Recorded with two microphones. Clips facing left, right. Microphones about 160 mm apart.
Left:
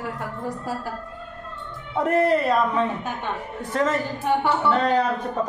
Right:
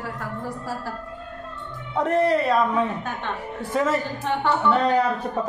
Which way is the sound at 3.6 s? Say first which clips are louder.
Right 1 dB; 10° right (ahead or behind).